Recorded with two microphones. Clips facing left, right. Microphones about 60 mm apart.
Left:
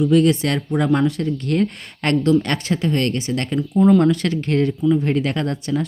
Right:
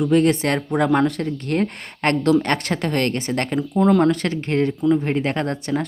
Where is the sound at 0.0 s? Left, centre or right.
Right.